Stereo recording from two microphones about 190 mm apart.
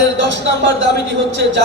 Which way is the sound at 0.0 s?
70° right (ahead or behind).